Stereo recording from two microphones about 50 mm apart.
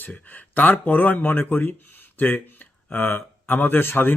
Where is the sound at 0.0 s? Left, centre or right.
Left.